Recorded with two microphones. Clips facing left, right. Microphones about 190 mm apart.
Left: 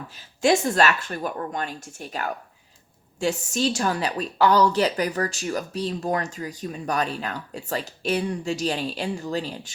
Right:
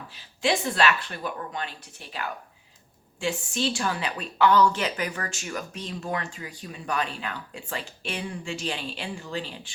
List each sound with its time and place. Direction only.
0.1 s a woman's voice: 45° left (ahead or behind)